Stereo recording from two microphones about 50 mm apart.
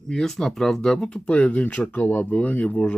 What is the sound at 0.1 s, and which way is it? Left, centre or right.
Speech, centre.